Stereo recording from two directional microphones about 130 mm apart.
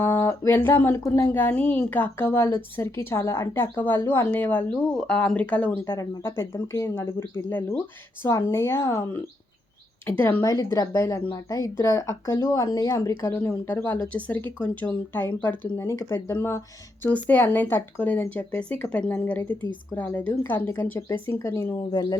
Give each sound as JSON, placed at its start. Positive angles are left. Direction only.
{"t": 0.0, "sound": "speech", "side_deg": 15}